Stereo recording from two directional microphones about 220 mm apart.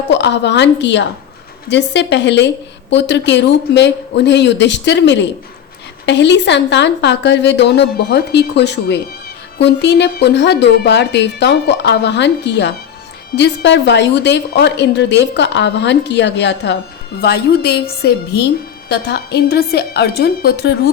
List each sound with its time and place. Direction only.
0.1 s a woman's voice: 50° left (ahead or behind)